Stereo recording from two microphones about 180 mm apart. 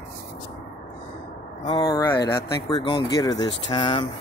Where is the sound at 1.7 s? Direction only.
20° left (ahead or behind).